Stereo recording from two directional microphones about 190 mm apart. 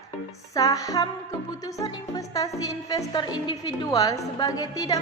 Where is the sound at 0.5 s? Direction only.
20° left (ahead or behind).